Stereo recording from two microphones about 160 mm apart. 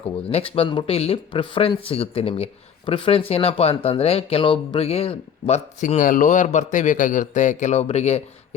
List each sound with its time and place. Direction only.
0.0 s speech: 35° left (ahead or behind)